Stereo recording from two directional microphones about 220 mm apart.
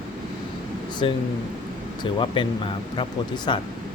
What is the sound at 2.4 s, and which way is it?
Speech, 20° left (ahead or behind).